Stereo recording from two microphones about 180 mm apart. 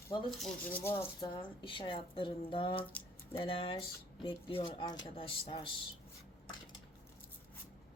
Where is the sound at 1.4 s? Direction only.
30° left (ahead or behind).